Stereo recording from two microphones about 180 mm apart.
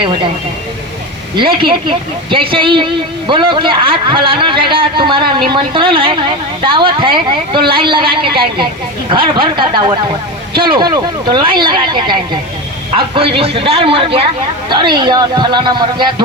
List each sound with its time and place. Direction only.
0.0 s speech: 30° right (ahead or behind)
1.4 s speech: 30° right (ahead or behind)